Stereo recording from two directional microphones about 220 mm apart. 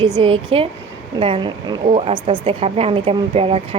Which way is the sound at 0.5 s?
25° right (ahead or behind).